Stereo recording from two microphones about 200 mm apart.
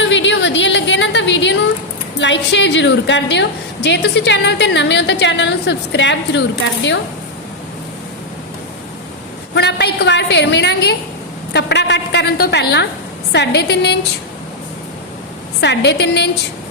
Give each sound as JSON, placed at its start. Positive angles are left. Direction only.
{"t": 0.0, "sound": "a sound", "side_deg": 65}
{"t": 2.1, "sound": "a woman's voice", "side_deg": 65}
{"t": 9.6, "sound": "a woman's voice", "side_deg": 60}
{"t": 15.6, "sound": "a woman's voice", "side_deg": 60}